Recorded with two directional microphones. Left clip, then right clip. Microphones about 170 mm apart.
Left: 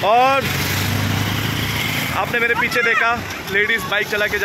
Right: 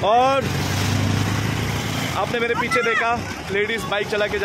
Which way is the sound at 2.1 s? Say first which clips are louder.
Left 3 dB; 5° right (ahead or behind).